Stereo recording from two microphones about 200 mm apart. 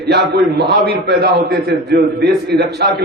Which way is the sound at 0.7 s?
55° right (ahead or behind).